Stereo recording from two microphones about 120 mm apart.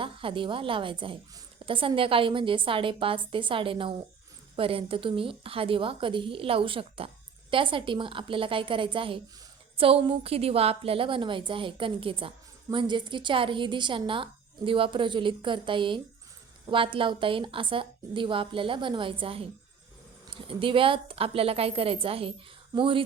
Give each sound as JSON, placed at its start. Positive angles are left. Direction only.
{"t": 0.0, "sound": "a woman's voice", "side_deg": -45}